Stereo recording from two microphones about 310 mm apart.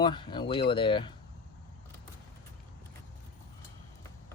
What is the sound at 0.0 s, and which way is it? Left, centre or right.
Speech, centre.